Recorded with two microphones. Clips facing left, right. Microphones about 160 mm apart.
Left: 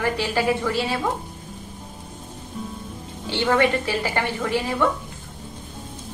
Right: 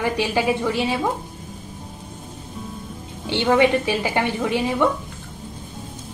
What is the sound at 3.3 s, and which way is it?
A woman's voice, 15° right (ahead or behind).